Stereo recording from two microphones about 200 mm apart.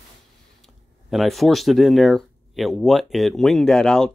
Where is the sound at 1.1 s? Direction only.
Centre (ahead or behind).